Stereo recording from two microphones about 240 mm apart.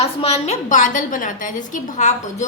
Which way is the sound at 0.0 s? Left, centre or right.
Left.